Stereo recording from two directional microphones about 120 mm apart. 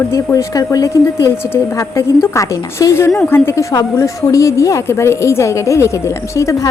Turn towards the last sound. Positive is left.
turn(degrees=25)  # may be behind; listen again after turning